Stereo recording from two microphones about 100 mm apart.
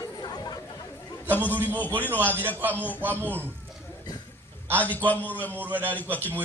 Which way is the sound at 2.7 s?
15° left (ahead or behind).